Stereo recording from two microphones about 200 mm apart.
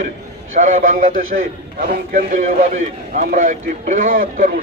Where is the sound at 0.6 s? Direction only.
45° right (ahead or behind).